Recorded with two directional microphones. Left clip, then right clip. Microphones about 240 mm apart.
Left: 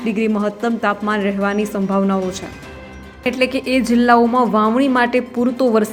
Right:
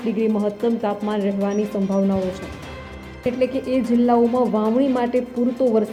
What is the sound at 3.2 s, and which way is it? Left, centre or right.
A woman's voice, centre.